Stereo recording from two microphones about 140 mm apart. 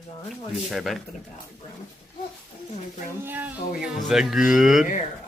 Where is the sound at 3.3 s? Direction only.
15° right (ahead or behind).